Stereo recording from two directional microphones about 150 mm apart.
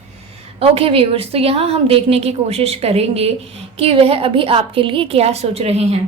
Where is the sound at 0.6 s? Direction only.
40° right (ahead or behind).